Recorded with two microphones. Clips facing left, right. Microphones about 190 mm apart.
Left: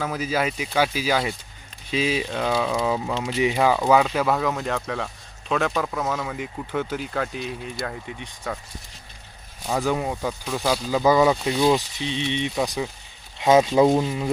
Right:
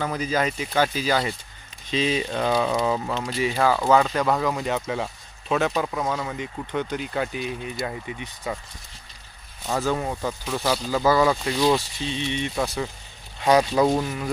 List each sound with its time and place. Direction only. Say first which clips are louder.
0.0 s speech: even; 5° left (ahead or behind)
9.6 s speech: left 1 dB; 10° left (ahead or behind)